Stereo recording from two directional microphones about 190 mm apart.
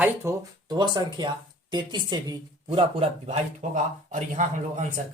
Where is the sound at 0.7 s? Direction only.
25° right (ahead or behind).